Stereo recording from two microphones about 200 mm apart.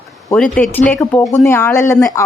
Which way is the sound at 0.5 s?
5° left (ahead or behind).